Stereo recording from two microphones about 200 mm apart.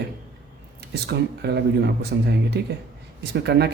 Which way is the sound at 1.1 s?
55° right (ahead or behind).